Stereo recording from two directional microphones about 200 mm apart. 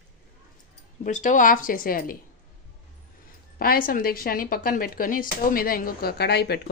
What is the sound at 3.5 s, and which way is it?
A woman's voice, 45° left (ahead or behind).